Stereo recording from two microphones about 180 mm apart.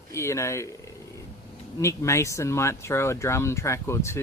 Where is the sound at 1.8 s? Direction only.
15° left (ahead or behind).